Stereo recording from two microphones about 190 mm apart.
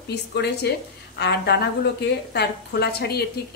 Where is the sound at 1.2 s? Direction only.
60° left (ahead or behind).